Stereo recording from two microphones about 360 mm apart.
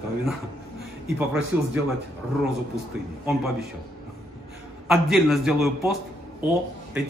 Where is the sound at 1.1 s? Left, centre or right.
Centre.